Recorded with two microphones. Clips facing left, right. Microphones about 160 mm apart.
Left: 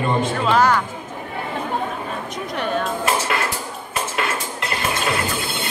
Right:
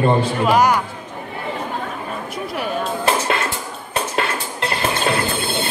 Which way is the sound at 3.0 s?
30° right (ahead or behind).